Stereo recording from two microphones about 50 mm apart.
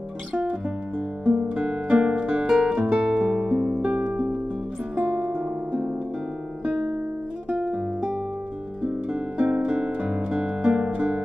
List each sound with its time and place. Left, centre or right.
1.2 s music: centre
7.4 s guitar: right
9.1 s music: right